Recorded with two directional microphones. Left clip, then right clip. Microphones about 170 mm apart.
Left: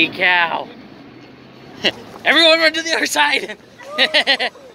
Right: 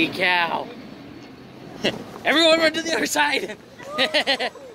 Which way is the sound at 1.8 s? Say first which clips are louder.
Left 5 dB; 10° right (ahead or behind).